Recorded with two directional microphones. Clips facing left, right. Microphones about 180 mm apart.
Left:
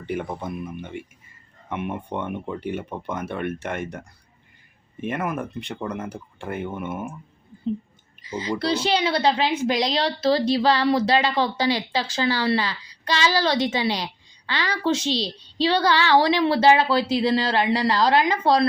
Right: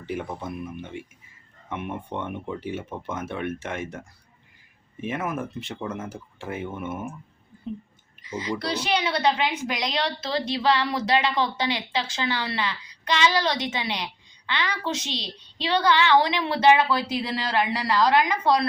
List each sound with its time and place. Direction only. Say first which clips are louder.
0.0 s speech: left 3 dB; centre (ahead or behind)
8.2 s a child's voice: left 3 dB; 30° left (ahead or behind)